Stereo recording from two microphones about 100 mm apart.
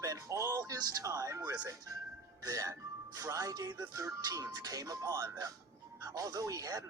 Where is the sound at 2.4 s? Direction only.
35° right (ahead or behind).